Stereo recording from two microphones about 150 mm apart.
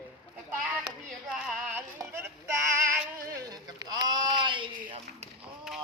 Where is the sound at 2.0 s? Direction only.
15° right (ahead or behind); by 4.9 s 30° right (ahead or behind).